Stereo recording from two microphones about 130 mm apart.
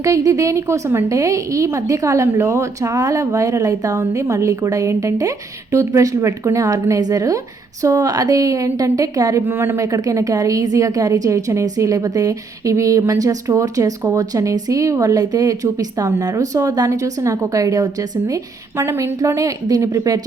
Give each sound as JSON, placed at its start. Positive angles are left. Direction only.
{"t": 0.0, "sound": "speech", "side_deg": -25}